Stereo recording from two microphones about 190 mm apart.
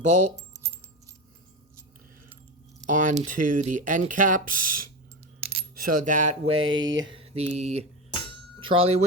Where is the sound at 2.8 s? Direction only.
40° right (ahead or behind).